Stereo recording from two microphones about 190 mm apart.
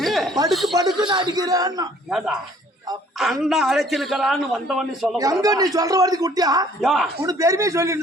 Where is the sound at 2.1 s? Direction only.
Centre (ahead or behind).